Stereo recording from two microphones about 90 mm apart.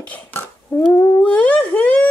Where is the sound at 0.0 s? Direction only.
15° left (ahead or behind).